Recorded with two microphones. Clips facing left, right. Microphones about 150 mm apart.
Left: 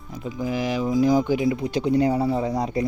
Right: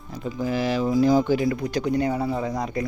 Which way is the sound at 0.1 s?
Centre (ahead or behind).